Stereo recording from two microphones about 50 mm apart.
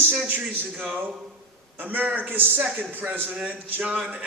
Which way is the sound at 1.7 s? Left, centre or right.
Right.